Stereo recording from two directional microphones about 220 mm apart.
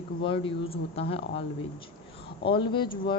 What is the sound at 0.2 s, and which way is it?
Speech, 25° left (ahead or behind).